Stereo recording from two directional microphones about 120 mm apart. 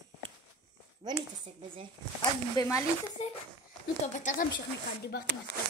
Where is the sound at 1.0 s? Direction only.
40° right (ahead or behind).